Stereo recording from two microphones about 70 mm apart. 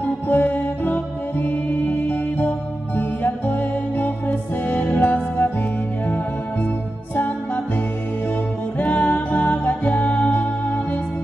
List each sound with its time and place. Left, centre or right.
0.0 s music: left
8.7 s music: left